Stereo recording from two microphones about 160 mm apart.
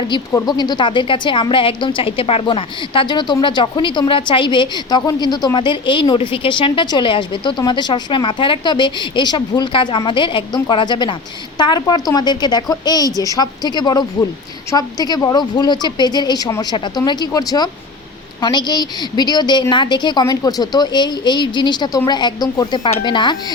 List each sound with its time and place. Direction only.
0.1 s a woman's voice: 25° left (ahead or behind)